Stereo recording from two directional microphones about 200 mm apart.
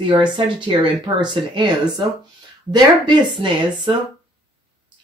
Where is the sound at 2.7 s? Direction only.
25° right (ahead or behind).